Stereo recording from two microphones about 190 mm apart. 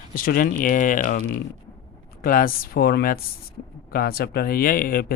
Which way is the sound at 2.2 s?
50° left (ahead or behind).